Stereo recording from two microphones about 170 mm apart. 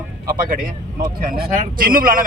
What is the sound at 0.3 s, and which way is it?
A man's voice, 55° right (ahead or behind).